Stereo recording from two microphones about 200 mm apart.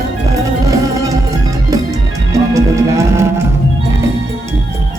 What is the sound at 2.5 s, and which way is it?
Music, 15° right (ahead or behind).